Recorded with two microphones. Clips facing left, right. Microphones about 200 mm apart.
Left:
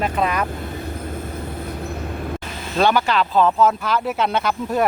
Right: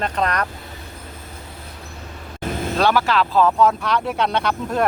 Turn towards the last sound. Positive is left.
turn(degrees=5)  # may be behind; listen again after turning